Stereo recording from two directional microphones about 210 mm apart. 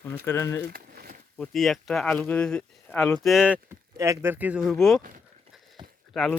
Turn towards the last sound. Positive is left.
turn(degrees=0)  # may be behind; listen again after turning